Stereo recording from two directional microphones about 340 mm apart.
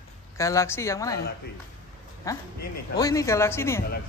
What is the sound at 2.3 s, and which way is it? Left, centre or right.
A woman's voice, centre.